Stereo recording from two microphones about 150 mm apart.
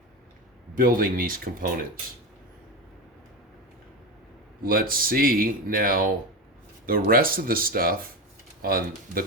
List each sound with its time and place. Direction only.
0.8 s speech: 70° right (ahead or behind)
4.6 s speech: 70° right (ahead or behind)